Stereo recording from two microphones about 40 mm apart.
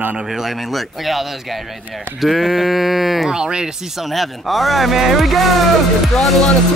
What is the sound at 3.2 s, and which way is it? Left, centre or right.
Speech, centre.